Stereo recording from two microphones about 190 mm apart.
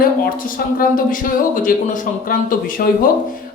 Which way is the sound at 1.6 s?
45° left (ahead or behind).